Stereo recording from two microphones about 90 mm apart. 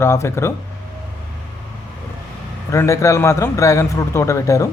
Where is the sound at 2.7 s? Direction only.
30° left (ahead or behind).